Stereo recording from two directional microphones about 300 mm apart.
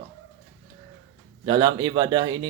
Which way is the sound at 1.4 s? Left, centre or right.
Centre.